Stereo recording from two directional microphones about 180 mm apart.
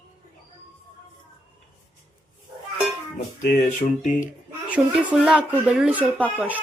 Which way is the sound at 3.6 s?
40° left (ahead or behind).